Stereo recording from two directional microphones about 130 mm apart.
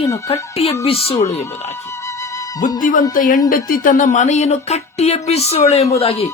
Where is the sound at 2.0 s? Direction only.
25° left (ahead or behind).